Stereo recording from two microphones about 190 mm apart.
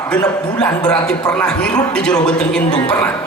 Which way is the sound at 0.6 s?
5° left (ahead or behind).